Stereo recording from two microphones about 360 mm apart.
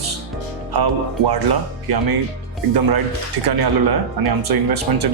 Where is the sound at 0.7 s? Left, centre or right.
Right.